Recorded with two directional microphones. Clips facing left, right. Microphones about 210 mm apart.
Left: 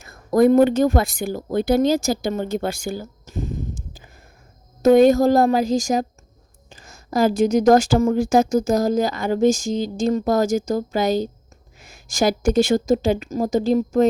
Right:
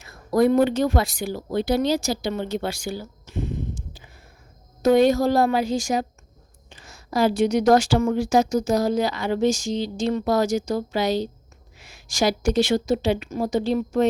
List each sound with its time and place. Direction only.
0.0 s speech: 50° left (ahead or behind)